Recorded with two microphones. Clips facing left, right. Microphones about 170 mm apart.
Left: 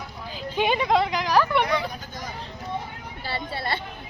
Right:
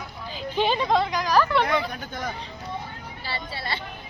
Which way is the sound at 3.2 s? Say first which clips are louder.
Left 4 dB; 55° left (ahead or behind).